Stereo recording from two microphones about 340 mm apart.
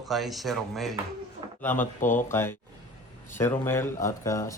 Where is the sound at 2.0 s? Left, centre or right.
Left.